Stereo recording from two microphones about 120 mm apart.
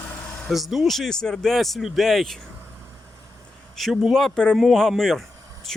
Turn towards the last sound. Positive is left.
turn(degrees=0)  # may be behind; listen again after turning